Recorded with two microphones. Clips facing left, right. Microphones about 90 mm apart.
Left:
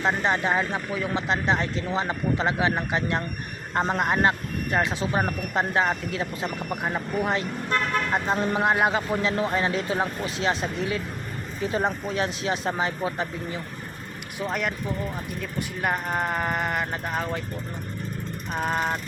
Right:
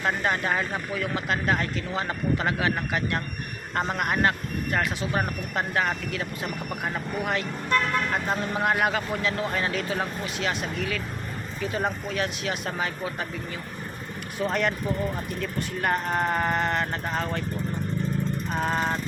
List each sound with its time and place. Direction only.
0.0 s speech: 25° left (ahead or behind)
14.4 s vehicle: 5° left (ahead or behind)
15.4 s speech: 5° left (ahead or behind)
18.4 s vehicle: 5° left (ahead or behind)